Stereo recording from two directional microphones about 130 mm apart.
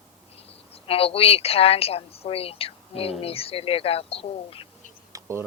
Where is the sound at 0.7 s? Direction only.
45° left (ahead or behind).